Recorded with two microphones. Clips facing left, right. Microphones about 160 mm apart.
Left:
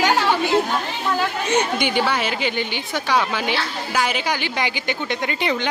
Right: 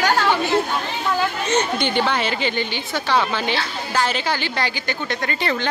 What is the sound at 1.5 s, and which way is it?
A woman's voice, 10° left (ahead or behind).